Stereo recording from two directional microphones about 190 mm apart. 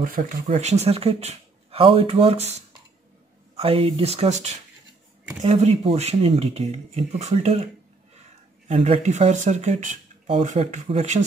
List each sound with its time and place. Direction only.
0.0 s speech: 45° right (ahead or behind)
8.6 s speech: 30° right (ahead or behind)